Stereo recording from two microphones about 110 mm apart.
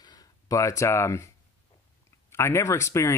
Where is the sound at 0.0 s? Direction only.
35° left (ahead or behind).